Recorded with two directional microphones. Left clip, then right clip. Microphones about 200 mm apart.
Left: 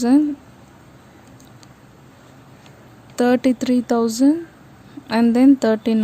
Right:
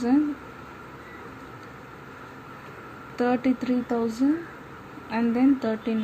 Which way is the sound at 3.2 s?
75° left (ahead or behind).